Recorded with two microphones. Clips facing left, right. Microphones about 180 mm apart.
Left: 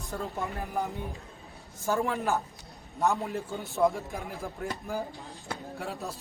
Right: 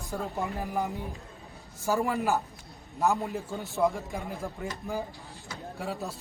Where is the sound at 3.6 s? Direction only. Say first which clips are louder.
Left 1 dB; centre (ahead or behind).